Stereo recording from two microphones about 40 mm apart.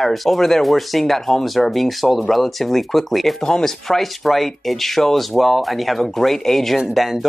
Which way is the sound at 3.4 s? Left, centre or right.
Centre.